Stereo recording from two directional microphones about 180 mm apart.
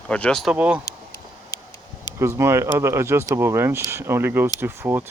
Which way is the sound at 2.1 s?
15° right (ahead or behind).